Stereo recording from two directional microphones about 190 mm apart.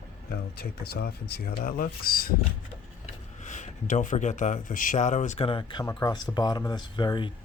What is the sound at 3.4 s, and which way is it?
Speech, 40° left (ahead or behind).